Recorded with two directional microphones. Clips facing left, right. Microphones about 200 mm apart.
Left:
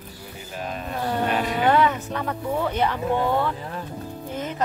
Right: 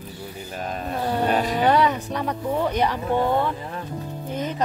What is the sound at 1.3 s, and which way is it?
Speech, 40° right (ahead or behind).